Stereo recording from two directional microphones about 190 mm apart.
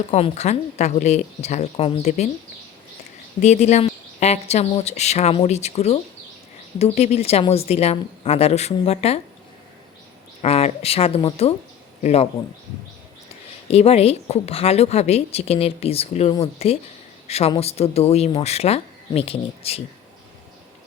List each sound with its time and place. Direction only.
0.1 s a woman's voice: 35° left (ahead or behind)
3.4 s a woman's voice: 35° left (ahead or behind)
10.4 s a woman's voice: 30° left (ahead or behind)
13.7 s a woman's voice: 30° left (ahead or behind)